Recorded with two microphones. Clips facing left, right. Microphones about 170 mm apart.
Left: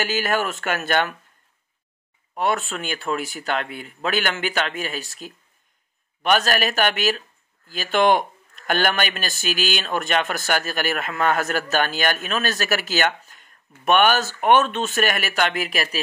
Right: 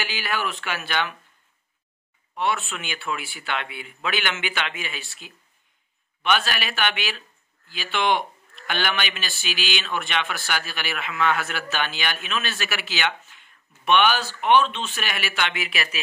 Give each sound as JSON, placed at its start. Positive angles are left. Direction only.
{"t": 0.0, "sound": "speech", "side_deg": 45}
{"t": 2.3, "sound": "speech", "side_deg": 40}